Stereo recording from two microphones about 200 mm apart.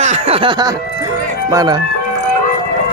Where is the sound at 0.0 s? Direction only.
30° right (ahead or behind).